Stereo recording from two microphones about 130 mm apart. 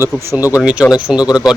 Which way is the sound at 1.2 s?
30° left (ahead or behind).